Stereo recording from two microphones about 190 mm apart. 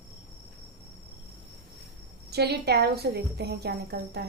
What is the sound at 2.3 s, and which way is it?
A woman's voice, 60° right (ahead or behind).